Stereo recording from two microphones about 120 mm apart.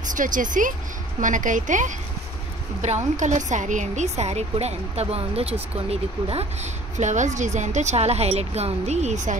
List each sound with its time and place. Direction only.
0.0 s a woman's voice: 90° right